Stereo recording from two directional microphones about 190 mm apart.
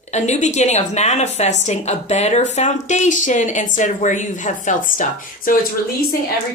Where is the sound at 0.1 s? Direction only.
35° left (ahead or behind).